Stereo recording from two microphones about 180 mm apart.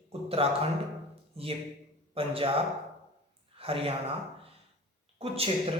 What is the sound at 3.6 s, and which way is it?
Speech, 30° right (ahead or behind).